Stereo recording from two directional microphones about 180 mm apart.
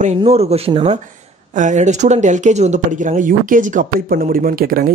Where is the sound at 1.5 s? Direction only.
45° right (ahead or behind).